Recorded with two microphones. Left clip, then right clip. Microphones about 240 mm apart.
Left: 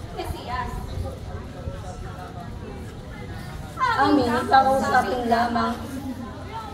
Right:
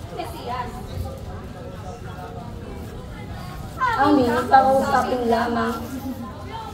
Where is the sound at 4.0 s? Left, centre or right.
Left.